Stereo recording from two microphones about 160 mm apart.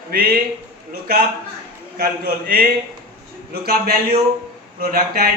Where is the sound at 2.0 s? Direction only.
65° right (ahead or behind).